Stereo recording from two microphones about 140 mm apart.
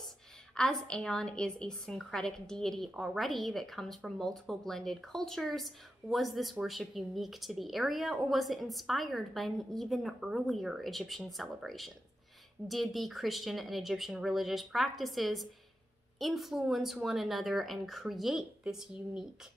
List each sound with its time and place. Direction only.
0.6 s a woman's voice: 5° left (ahead or behind)